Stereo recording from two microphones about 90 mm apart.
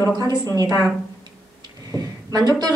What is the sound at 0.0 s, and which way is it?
Speech, 40° right (ahead or behind).